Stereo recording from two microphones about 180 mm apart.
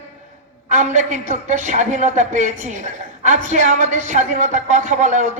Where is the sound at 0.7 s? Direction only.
40° right (ahead or behind).